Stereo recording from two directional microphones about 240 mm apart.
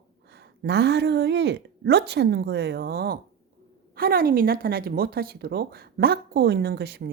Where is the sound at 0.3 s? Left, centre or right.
Right.